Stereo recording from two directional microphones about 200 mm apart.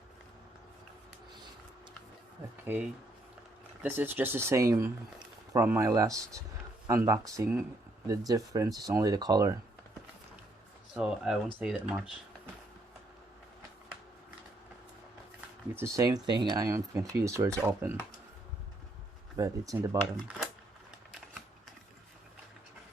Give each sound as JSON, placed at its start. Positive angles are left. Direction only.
{"t": 2.7, "sound": "speech", "side_deg": -10}
{"t": 3.8, "sound": "speech", "side_deg": -10}
{"t": 10.9, "sound": "speech", "side_deg": -5}
{"t": 15.4, "sound": "speech", "side_deg": -10}
{"t": 19.4, "sound": "speech", "side_deg": -15}